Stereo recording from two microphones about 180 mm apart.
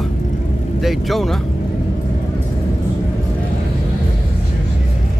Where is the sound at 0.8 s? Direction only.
Centre (ahead or behind).